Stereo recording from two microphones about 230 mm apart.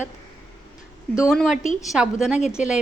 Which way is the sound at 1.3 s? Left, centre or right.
Centre.